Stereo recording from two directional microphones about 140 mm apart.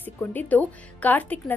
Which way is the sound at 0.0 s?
15° left (ahead or behind).